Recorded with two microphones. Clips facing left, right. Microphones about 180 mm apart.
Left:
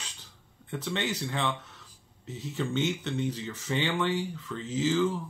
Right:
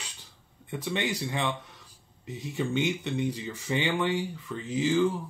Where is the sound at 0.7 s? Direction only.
10° right (ahead or behind).